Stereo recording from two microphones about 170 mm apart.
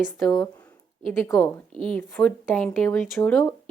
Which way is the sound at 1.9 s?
10° left (ahead or behind).